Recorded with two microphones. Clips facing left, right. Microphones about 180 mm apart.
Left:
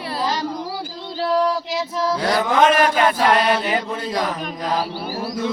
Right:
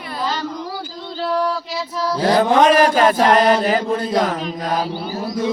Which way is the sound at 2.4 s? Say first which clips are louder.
Right 3 dB; 35° right (ahead or behind).